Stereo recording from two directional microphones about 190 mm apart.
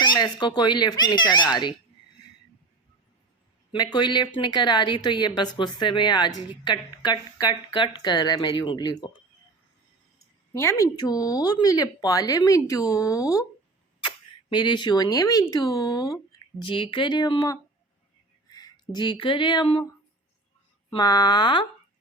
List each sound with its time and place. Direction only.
0.0 s speech: 25° left (ahead or behind)
3.9 s speech: 25° left (ahead or behind)
10.5 s speech: 15° left (ahead or behind)
14.5 s speech: 25° left (ahead or behind)
20.9 s speech: 20° left (ahead or behind)